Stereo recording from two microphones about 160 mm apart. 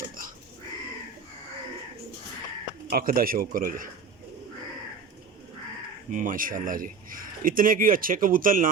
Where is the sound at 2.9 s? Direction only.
65° right (ahead or behind).